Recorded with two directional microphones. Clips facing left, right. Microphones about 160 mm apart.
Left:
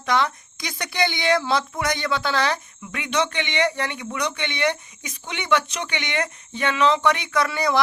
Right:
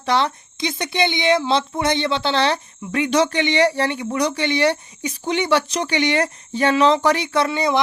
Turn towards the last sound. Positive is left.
turn(degrees=-20)  # may be behind; listen again after turning